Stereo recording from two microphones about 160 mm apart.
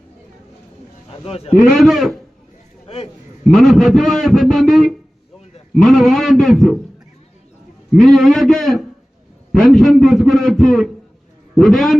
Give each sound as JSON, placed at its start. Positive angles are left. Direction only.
{"t": 1.1, "sound": "speech", "side_deg": 40}
{"t": 1.7, "sound": "a man's voice", "side_deg": 0}
{"t": 2.8, "sound": "a sound", "side_deg": 40}
{"t": 3.5, "sound": "a man's voice", "side_deg": 0}
{"t": 7.9, "sound": "a man's voice", "side_deg": 0}